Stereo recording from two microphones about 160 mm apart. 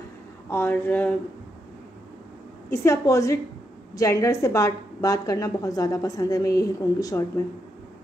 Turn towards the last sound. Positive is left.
turn(degrees=20)  # may be behind; listen again after turning